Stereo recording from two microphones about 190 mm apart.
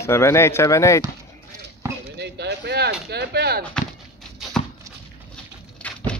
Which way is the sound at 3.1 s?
60° right (ahead or behind).